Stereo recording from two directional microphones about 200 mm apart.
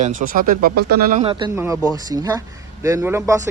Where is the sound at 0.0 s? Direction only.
40° right (ahead or behind).